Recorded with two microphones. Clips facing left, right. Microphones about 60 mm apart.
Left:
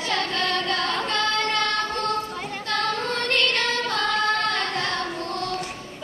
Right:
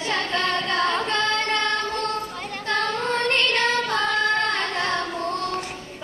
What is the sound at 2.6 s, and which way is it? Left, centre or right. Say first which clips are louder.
Female singing: right 2 dB; right.